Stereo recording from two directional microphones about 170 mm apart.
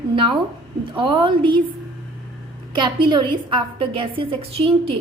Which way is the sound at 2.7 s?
25° right (ahead or behind).